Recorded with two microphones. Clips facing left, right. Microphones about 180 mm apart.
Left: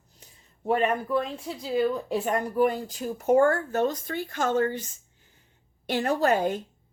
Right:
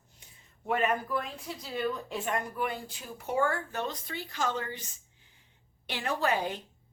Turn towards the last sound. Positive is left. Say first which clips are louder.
# left 6 dB
turn(degrees=45)  # may be behind; listen again after turning